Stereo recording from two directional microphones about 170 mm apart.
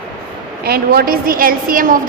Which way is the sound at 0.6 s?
65° right (ahead or behind).